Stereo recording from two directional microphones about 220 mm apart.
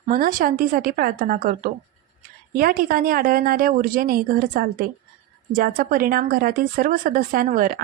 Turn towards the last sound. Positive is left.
turn(degrees=-40)  # may be behind; listen again after turning